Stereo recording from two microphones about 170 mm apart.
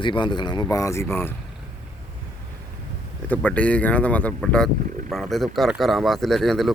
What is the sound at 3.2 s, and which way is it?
Speech, 10° left (ahead or behind).